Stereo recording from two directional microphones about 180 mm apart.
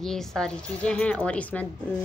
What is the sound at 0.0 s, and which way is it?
A woman's voice, centre (ahead or behind).